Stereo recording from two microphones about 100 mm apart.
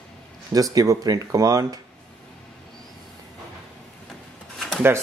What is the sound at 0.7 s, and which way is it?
Speech, 40° right (ahead or behind).